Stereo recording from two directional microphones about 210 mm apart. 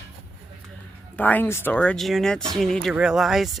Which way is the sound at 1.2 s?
10° left (ahead or behind).